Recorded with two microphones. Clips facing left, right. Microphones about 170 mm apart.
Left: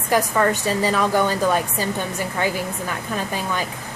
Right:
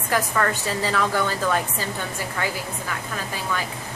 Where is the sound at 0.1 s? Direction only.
15° left (ahead or behind).